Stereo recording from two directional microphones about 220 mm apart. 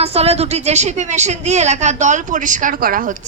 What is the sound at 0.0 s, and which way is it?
A woman's voice, 25° right (ahead or behind).